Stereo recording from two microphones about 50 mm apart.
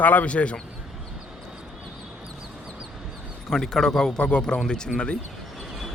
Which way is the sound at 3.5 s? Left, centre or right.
Centre.